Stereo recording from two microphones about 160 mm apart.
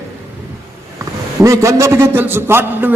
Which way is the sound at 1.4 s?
20° right (ahead or behind).